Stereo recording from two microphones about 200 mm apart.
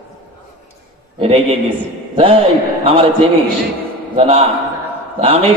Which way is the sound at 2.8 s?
30° right (ahead or behind).